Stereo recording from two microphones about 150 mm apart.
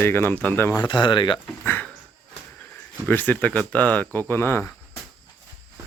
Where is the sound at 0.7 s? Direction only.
25° left (ahead or behind).